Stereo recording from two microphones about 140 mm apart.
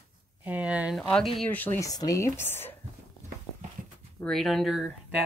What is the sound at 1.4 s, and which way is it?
Speech, 15° left (ahead or behind).